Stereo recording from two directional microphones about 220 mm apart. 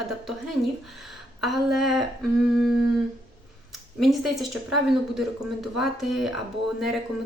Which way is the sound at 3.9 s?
Centre (ahead or behind).